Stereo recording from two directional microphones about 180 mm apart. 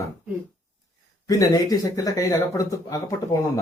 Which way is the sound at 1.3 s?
20° left (ahead or behind).